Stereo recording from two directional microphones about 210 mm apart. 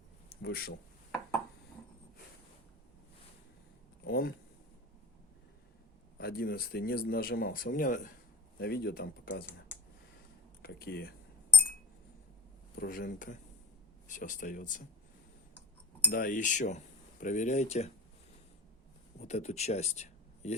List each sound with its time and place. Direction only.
0.4 s speech: 50° left (ahead or behind)
4.0 s speech: 45° left (ahead or behind)
6.1 s speech: 45° left (ahead or behind)
8.5 s speech: 50° left (ahead or behind)
10.6 s speech: 45° left (ahead or behind)
12.7 s speech: 45° left (ahead or behind)
16.0 s speech: 40° left (ahead or behind)
19.2 s speech: 30° left (ahead or behind)